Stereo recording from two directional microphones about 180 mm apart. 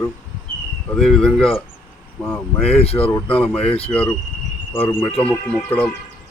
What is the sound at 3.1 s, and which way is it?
Speech, 10° left (ahead or behind).